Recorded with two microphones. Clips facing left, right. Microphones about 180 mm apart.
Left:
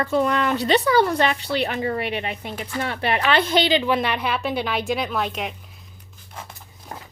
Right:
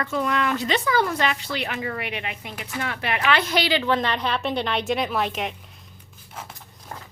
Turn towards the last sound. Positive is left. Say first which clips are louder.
# left 2 dB
turn(degrees=5)  # may be behind; listen again after turning